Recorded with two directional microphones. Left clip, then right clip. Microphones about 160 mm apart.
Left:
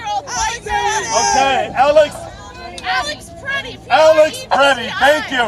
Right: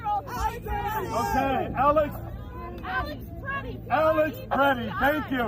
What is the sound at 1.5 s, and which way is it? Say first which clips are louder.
Speech: left 11 dB; 50° left (ahead or behind).